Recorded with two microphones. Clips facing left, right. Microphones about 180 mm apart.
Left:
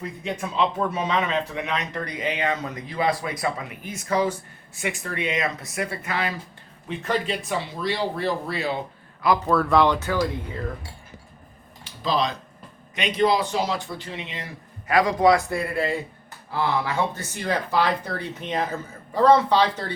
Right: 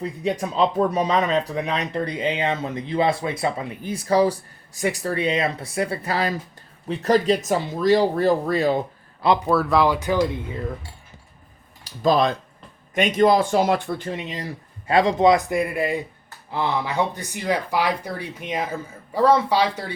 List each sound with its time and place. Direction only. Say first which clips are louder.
0.0 s speech: right 5 dB; 35° right (ahead or behind)
9.5 s speech: left 2 dB; 5° right (ahead or behind)
10.0 s speech: right 4 dB; 15° right (ahead or behind)
11.9 s speech: right 6 dB; 50° right (ahead or behind)
14.8 s speech: right 2 dB; 25° right (ahead or behind); by 19.8 s 10° right (ahead or behind)